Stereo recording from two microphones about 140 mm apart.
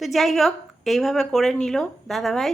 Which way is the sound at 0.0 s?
Centre (ahead or behind).